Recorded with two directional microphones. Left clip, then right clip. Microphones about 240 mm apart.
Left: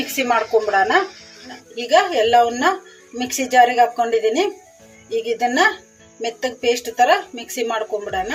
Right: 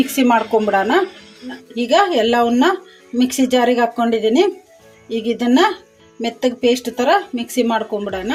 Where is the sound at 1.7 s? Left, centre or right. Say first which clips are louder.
Right 2 dB; right.